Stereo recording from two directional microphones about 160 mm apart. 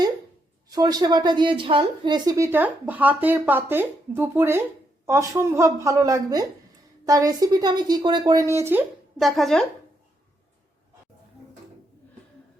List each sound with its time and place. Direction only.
0.7 s a woman's voice: 25° right (ahead or behind)
9.1 s a woman's voice: centre (ahead or behind)